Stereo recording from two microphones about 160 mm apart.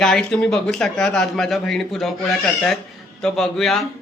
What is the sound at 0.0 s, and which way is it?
A man's voice, 5° left (ahead or behind).